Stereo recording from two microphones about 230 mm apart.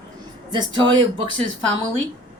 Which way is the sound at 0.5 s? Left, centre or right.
Right.